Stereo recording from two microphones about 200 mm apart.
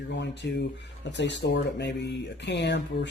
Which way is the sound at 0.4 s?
60° left (ahead or behind).